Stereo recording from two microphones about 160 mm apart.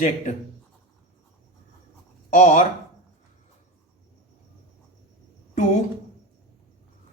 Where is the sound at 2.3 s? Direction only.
45° left (ahead or behind).